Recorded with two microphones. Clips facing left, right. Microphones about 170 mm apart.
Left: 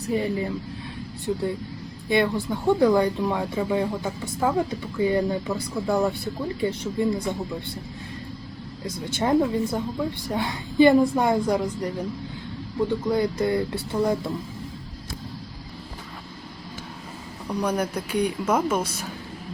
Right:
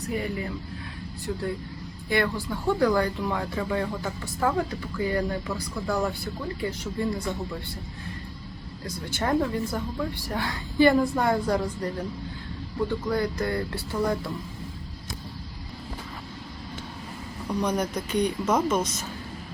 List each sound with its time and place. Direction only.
0.1 s speech: 25° left (ahead or behind)
9.1 s speech: 20° left (ahead or behind)
13.1 s speech: 20° left (ahead or behind)
17.5 s a woman's voice: 10° left (ahead or behind)